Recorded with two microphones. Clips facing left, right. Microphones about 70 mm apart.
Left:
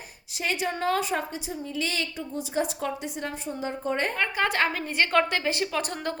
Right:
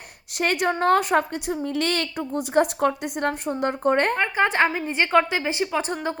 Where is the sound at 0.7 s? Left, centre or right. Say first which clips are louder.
Right 8 dB; right.